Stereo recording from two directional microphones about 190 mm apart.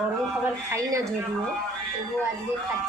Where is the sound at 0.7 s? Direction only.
15° right (ahead or behind).